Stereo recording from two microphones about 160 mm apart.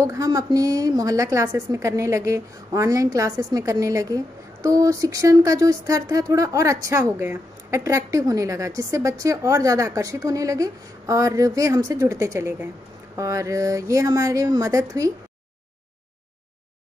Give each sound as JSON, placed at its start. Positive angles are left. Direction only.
{"t": 0.0, "sound": "a woman's voice", "side_deg": -20}